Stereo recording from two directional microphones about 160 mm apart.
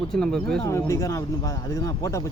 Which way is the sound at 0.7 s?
20° left (ahead or behind).